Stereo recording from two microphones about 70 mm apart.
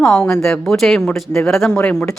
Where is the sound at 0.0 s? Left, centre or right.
Centre.